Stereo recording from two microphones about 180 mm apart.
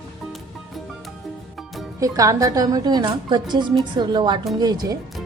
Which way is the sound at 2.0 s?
20° right (ahead or behind).